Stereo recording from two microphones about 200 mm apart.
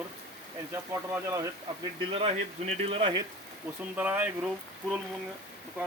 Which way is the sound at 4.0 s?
5° right (ahead or behind).